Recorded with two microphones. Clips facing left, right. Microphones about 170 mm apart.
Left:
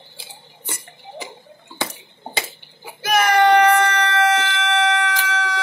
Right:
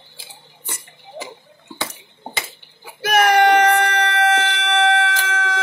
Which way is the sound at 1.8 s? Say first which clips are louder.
Left 2 dB; 30° left (ahead or behind).